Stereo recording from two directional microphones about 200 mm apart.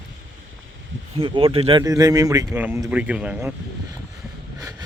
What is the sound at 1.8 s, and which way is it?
Speech, 15° right (ahead or behind).